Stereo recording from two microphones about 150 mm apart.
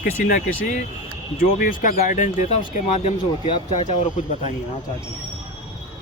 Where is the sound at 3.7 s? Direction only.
50° left (ahead or behind).